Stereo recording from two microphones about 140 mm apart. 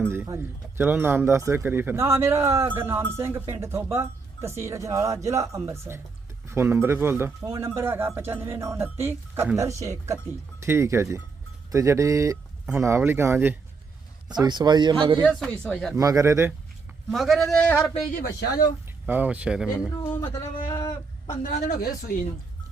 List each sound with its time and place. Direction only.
0.0 s speech: 15° right (ahead or behind)
14.3 s speech: 30° right (ahead or behind)
15.2 s speech: 5° left (ahead or behind)
16.0 s speech: 20° right (ahead or behind)
17.1 s speech: centre (ahead or behind)
18.2 s speech: 90° left
19.0 s speech: 10° right (ahead or behind)
20.2 s speech: 25° left (ahead or behind)
20.7 s a sound: 20° left (ahead or behind)
21.5 s speech: 70° left (ahead or behind)